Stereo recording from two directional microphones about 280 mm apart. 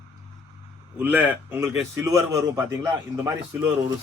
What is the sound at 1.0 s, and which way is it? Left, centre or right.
A man's voice, centre.